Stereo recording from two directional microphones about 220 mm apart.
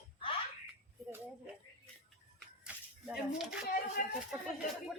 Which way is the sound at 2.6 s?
5° right (ahead or behind).